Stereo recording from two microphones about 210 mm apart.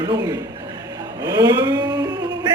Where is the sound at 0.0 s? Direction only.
15° right (ahead or behind).